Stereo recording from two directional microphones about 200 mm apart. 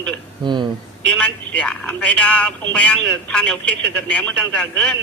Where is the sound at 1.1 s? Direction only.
5° left (ahead or behind).